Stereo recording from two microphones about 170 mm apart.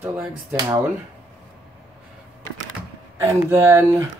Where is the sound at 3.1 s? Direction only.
15° right (ahead or behind).